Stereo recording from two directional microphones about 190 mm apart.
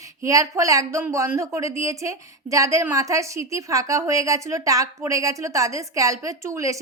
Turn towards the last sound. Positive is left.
turn(degrees=-15)  # may be behind; listen again after turning